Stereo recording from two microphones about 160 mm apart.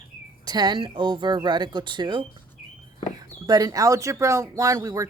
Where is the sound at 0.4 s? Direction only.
25° right (ahead or behind).